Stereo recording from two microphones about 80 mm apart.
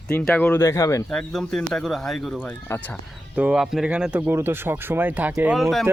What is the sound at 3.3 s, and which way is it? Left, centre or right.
Speech, centre.